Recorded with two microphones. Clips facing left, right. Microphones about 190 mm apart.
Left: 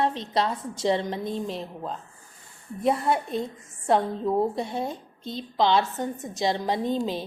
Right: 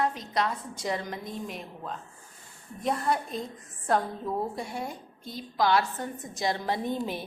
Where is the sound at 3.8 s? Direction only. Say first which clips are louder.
Left 5 dB; 25° left (ahead or behind).